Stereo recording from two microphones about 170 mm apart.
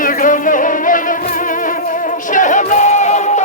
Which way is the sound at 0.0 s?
50° left (ahead or behind).